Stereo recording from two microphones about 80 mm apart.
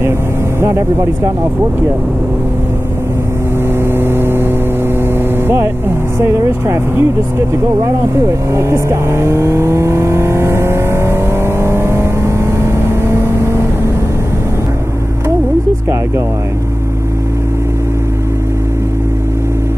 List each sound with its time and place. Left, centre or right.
0.6 s speech: right
3.8 s vehicle: right
6.1 s speech: right
7.8 s vehicle: right